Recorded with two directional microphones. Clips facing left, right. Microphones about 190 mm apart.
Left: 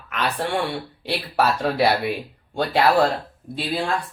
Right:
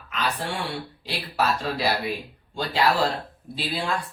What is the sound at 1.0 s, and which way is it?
Speech, 60° left (ahead or behind).